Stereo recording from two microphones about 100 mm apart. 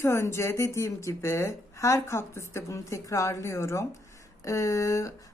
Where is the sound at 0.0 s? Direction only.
25° left (ahead or behind).